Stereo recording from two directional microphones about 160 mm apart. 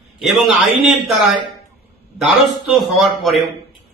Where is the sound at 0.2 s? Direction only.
Centre (ahead or behind).